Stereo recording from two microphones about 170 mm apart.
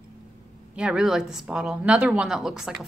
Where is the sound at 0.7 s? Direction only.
5° right (ahead or behind).